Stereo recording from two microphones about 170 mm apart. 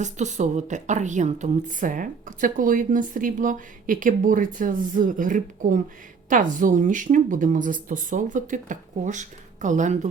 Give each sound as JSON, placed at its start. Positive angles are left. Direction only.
{"t": 0.0, "sound": "speech", "side_deg": -45}